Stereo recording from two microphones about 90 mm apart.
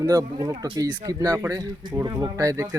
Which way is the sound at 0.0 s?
45° right (ahead or behind).